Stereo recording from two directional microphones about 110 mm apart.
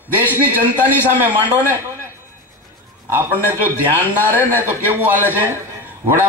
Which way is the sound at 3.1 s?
20° right (ahead or behind).